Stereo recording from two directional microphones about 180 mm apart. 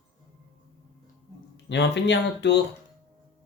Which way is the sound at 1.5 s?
75° left (ahead or behind).